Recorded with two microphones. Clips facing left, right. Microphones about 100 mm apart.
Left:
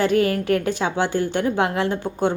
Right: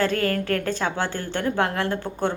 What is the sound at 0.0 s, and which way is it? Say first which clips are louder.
A woman's voice: left 4 dB; 15° left (ahead or behind).